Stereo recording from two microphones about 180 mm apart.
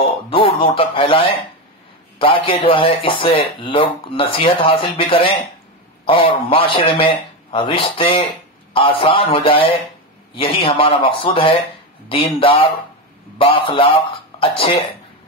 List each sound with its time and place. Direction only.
0.3 s speech: 30° left (ahead or behind)